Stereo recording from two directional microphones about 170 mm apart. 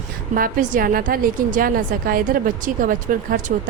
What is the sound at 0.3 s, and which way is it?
Speech, 55° right (ahead or behind).